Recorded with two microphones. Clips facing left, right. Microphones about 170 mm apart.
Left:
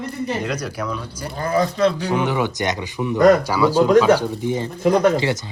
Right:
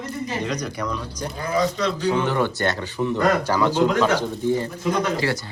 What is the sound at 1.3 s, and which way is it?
Speech, 50° left (ahead or behind).